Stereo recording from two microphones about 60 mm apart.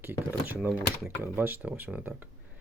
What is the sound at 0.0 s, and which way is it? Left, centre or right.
Speech, right.